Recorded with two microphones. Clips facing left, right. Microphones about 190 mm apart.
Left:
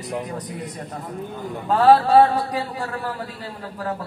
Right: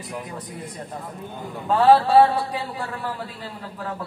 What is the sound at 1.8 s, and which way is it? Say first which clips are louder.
Mantra: left 1 dB; 40° left (ahead or behind).